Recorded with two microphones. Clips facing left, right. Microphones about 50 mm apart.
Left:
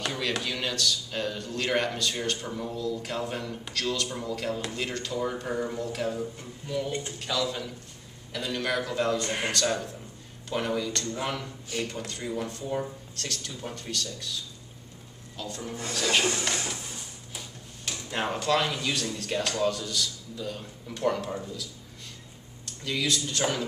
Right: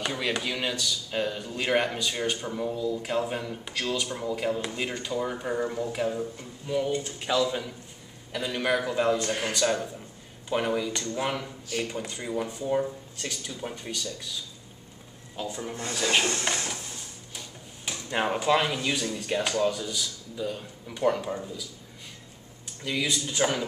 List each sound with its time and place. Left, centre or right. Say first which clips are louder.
0.0 s speech: right 1 dB; centre
9.2 s speech: right 1 dB; left
9.5 s speech: right 2 dB; centre
15.4 s speech: right 2 dB; centre
16.5 s a sound: even; centre
17.8 s speech: right 3 dB; centre
22.7 s speech: even; centre